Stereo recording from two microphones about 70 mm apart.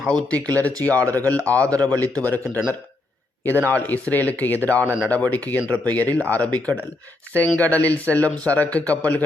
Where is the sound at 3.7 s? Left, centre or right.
Left.